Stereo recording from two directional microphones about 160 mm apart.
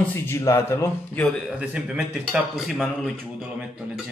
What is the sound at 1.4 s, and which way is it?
A man's voice, 5° right (ahead or behind).